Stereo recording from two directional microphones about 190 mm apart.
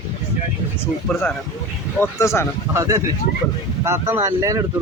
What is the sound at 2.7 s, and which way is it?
Speech, 15° right (ahead or behind).